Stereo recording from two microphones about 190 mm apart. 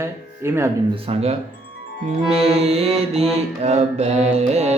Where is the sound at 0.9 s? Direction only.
30° right (ahead or behind).